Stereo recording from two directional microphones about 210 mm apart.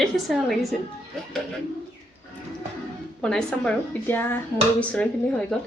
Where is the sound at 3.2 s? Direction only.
5° left (ahead or behind).